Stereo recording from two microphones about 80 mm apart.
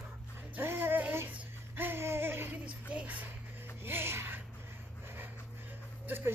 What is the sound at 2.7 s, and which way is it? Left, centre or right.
Speech, centre.